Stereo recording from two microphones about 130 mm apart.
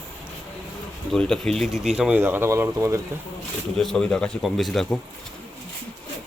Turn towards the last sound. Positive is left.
turn(degrees=0)  # may be behind; listen again after turning